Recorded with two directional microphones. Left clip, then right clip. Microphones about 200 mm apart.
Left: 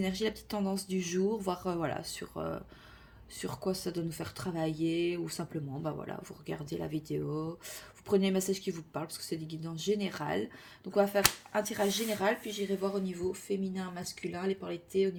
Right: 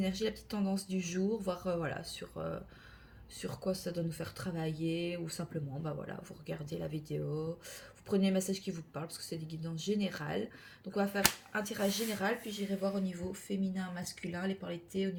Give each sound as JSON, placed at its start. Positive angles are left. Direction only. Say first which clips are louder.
{"t": 0.0, "sound": "speech", "louder": "left 2 dB", "side_deg": 45}